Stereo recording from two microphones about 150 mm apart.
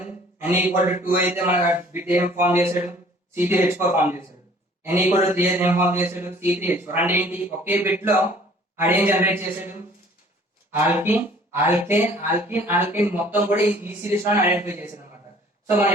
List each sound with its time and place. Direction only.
0.0 s a sound: 10° right (ahead or behind)
0.8 s a man's voice: 15° right (ahead or behind)
10.8 s speech: 15° right (ahead or behind)